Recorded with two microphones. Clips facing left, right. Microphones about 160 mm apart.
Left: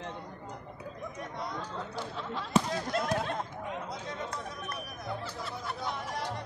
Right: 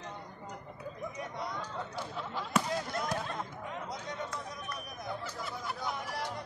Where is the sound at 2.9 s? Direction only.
80° left.